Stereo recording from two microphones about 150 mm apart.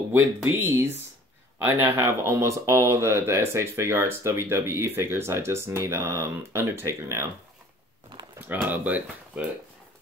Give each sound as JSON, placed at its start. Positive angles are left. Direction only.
{"t": 0.1, "sound": "speech", "side_deg": -15}
{"t": 8.4, "sound": "speech", "side_deg": -10}